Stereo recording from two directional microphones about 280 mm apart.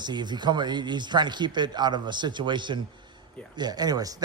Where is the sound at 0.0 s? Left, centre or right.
Centre.